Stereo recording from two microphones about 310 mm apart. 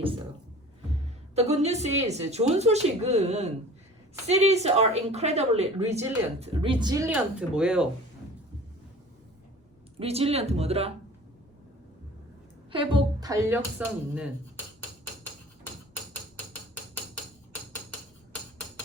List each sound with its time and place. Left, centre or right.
1.4 s a woman's voice: right; by 7.9 s centre
10.0 s a woman's voice: centre
12.7 s speech: centre